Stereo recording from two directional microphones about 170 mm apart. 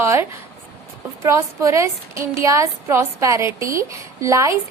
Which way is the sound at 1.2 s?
15° right (ahead or behind).